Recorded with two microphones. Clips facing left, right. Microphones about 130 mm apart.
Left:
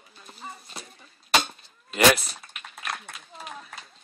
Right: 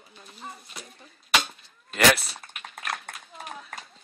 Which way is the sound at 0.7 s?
35° left (ahead or behind).